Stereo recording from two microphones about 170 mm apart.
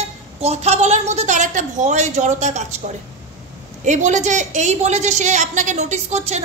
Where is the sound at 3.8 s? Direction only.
45° right (ahead or behind).